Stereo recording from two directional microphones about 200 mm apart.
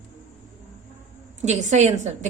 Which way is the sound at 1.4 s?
35° right (ahead or behind).